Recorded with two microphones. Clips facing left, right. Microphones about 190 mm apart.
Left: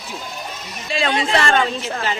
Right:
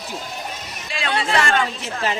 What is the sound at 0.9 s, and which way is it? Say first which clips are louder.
Speech: left 8 dB; 25° left (ahead or behind).